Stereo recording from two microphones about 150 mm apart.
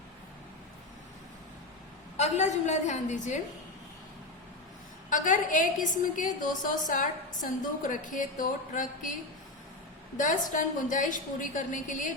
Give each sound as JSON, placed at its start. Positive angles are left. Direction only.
{"t": 2.1, "sound": "a woman's voice", "side_deg": 50}
{"t": 5.0, "sound": "a woman's voice", "side_deg": 60}
{"t": 10.2, "sound": "a woman's voice", "side_deg": 60}